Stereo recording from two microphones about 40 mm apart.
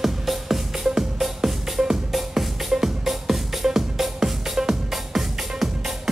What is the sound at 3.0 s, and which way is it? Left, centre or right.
Music, centre.